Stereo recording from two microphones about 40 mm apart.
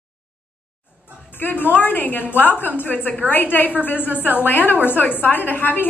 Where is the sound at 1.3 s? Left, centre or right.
Left.